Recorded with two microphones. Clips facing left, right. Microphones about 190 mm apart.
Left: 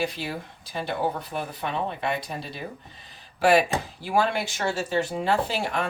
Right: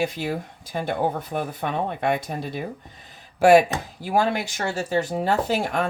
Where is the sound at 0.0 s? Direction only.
45° right (ahead or behind).